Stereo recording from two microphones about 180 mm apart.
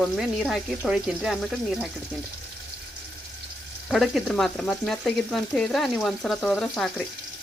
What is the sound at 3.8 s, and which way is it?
Frying, centre (ahead or behind).